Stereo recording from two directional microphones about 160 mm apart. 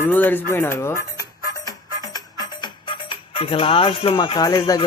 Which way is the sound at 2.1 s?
25° left (ahead or behind).